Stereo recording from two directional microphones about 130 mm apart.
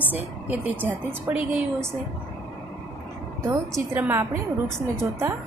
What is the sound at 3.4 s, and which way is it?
A woman's voice, 15° right (ahead or behind).